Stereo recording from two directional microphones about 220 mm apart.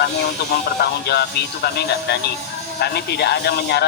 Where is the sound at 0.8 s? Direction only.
50° left (ahead or behind).